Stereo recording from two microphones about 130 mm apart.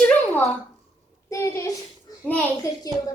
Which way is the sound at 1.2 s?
25° left (ahead or behind).